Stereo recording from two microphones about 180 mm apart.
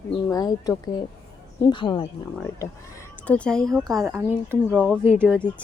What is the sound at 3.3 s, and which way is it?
Speech, 5° left (ahead or behind).